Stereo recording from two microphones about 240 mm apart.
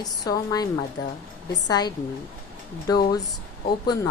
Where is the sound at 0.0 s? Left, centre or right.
Centre.